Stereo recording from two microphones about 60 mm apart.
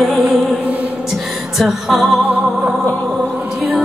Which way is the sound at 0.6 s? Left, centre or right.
Right.